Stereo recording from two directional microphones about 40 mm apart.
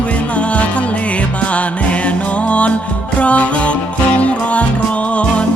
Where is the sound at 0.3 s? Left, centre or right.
Left.